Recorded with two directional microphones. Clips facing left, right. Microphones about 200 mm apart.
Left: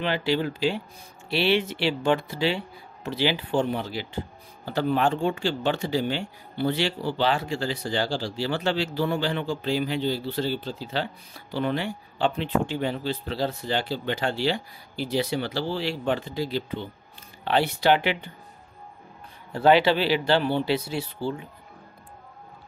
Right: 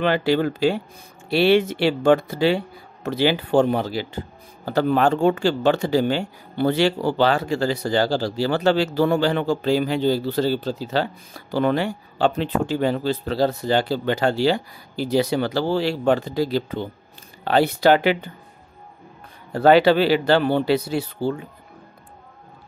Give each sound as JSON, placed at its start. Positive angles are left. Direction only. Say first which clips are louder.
{"t": 0.0, "sound": "speech", "louder": "right 6 dB", "side_deg": -50}
{"t": 19.5, "sound": "speech", "louder": "right 5 dB", "side_deg": -45}